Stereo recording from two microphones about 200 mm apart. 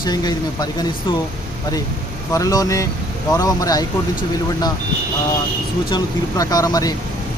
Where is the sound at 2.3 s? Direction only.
15° left (ahead or behind).